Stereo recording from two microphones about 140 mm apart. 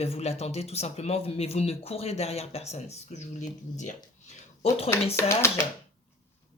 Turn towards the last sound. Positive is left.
turn(degrees=20)  # may be behind; listen again after turning